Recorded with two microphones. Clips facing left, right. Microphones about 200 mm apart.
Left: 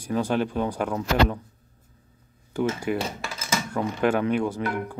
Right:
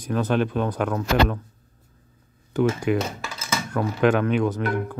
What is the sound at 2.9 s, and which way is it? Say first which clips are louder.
Speech: right 4 dB; 70° right (ahead or behind).